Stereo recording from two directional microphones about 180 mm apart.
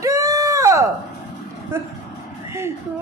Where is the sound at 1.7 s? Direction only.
15° right (ahead or behind).